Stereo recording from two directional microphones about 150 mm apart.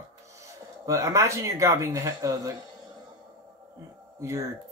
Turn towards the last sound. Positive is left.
turn(degrees=-20)  # may be behind; listen again after turning